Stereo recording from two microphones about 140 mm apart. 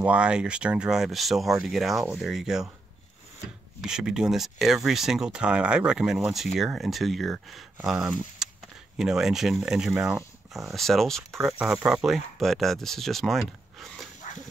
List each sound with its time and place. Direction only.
0.0 s speech: 10° right (ahead or behind)
3.8 s speech: 5° right (ahead or behind)